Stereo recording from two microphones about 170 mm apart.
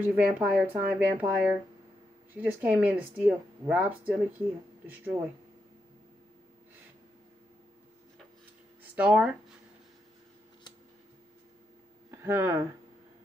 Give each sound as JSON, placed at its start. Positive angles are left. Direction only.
{"t": 0.0, "sound": "speech", "side_deg": -10}
{"t": 8.9, "sound": "speech", "side_deg": -5}
{"t": 12.1, "sound": "speech", "side_deg": -15}